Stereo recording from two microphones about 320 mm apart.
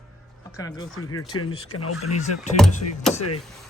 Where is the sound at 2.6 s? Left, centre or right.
Centre.